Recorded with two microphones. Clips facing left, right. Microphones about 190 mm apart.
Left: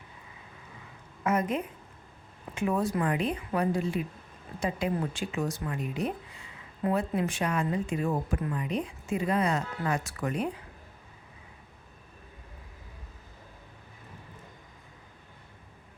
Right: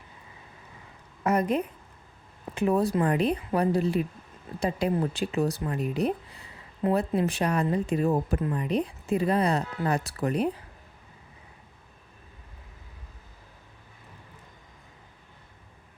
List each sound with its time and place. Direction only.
1.2 s a woman's voice: 35° right (ahead or behind)